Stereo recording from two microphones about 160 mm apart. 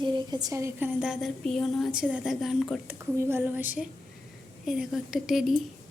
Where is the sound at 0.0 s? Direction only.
25° right (ahead or behind).